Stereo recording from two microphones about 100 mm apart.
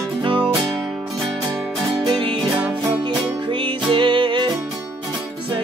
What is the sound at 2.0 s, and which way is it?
Music, 55° right (ahead or behind).